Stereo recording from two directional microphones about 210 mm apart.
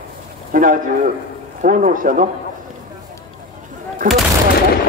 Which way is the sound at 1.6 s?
40° right (ahead or behind).